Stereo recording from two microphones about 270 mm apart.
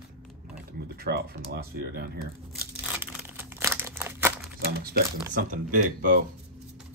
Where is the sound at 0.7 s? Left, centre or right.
Right.